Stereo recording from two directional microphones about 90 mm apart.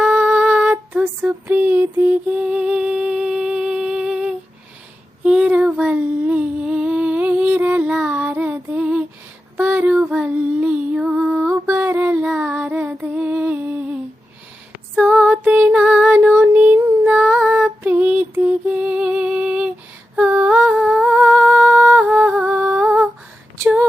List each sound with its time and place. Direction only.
0.0 s music: 15° right (ahead or behind)
1.0 s a sound: 20° right (ahead or behind)
5.2 s child singing: 10° right (ahead or behind)
6.6 s music: 10° right (ahead or behind)
9.6 s child singing: 20° right (ahead or behind)
11.6 s music: 20° right (ahead or behind)
12.9 s humming: 15° right (ahead or behind)
14.9 s music: 10° right (ahead or behind)
15.4 s a sound: 15° right (ahead or behind)
20.1 s humming: 15° right (ahead or behind)